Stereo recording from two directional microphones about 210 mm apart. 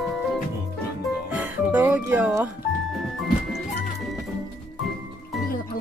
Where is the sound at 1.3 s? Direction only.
10° right (ahead or behind).